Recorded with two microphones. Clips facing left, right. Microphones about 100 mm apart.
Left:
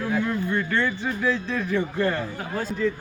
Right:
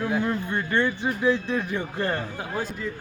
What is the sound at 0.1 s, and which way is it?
A man's voice, 20° right (ahead or behind).